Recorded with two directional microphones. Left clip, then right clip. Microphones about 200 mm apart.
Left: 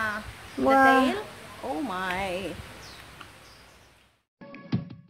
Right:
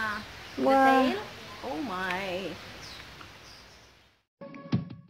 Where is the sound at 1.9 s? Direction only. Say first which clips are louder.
Left 1 dB; 50° left (ahead or behind).